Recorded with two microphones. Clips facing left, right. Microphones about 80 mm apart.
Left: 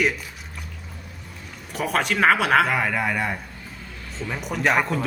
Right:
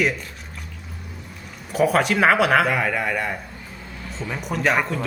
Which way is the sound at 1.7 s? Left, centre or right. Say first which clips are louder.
Right 5 dB; centre.